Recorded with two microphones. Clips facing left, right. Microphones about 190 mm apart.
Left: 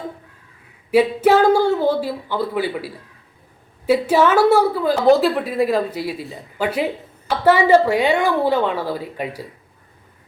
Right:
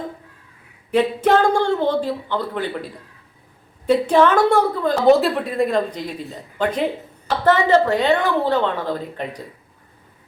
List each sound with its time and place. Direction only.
0.9 s a woman's voice: 10° left (ahead or behind)